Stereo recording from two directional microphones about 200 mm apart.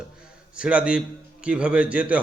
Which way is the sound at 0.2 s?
5° right (ahead or behind).